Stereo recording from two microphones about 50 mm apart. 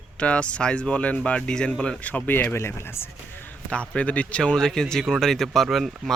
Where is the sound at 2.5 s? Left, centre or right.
Left.